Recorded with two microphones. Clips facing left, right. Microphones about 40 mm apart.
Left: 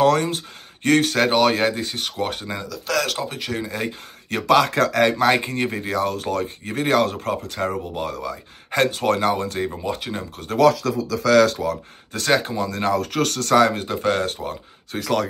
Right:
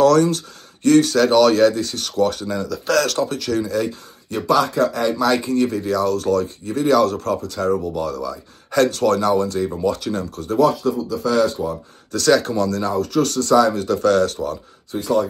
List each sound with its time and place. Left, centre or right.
0.0 s speech: left
0.8 s speech: left
2.7 s speech: centre; by 3.9 s left
4.3 s speech: left
5.1 s speech: left
9.7 s speech: left
10.6 s speech: left
12.1 s speech: left
12.4 s speech: centre
13.0 s speech: left
13.8 s speech: left
15.0 s speech: left